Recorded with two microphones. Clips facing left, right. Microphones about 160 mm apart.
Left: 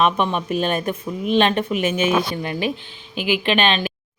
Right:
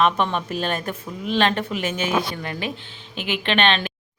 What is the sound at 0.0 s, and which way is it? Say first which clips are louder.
Speech: left 1 dB; 15° left (ahead or behind).